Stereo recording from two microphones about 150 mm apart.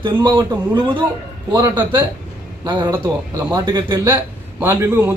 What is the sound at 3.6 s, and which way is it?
Speech, 30° right (ahead or behind).